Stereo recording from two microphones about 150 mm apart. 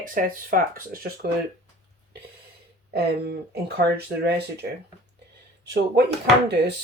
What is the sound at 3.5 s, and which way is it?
Speech, 90° right.